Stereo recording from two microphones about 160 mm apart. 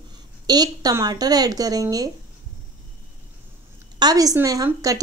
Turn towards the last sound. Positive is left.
turn(degrees=-20)  # may be behind; listen again after turning